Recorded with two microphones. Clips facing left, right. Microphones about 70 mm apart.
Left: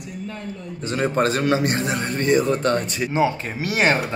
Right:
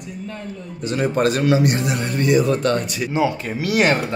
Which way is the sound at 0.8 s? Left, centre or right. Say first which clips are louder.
Right 2 dB; left.